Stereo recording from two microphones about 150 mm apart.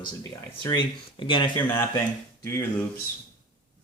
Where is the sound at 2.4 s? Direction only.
15° left (ahead or behind).